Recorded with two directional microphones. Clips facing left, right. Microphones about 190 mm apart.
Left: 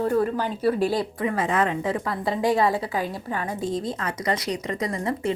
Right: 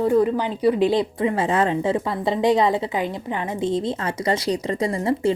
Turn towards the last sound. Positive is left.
turn(degrees=-30)  # may be behind; listen again after turning